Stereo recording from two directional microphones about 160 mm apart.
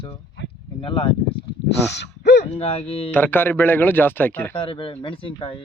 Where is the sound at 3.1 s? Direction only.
10° left (ahead or behind).